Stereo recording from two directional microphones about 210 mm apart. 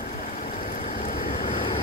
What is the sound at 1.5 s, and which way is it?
Waves, 25° left (ahead or behind).